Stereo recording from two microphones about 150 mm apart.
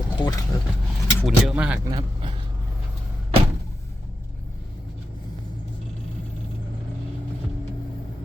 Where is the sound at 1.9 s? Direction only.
35° right (ahead or behind).